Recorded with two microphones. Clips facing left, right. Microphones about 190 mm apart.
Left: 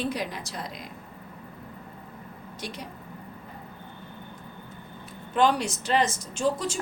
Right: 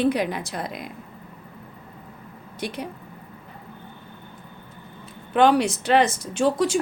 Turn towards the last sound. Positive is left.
turn(degrees=-70)  # may be behind; listen again after turning